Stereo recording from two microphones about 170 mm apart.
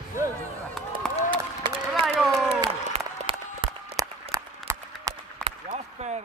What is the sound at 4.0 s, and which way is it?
Applause, 20° right (ahead or behind).